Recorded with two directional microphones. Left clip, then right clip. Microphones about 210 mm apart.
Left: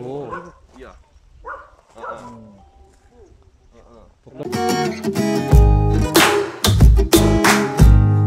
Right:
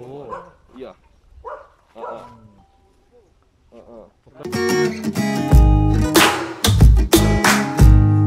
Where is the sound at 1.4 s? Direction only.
20° right (ahead or behind).